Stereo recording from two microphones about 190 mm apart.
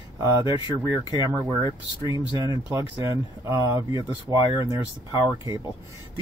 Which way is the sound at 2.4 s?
15° right (ahead or behind).